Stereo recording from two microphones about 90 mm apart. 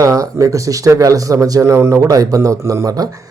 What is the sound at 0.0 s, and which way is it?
Speech, 40° right (ahead or behind).